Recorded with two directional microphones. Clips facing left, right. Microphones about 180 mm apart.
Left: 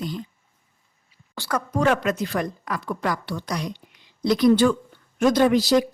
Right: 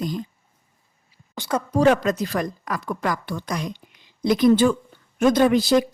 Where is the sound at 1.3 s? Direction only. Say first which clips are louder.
Right 2 dB; 20° right (ahead or behind); by 3.5 s 50° right (ahead or behind).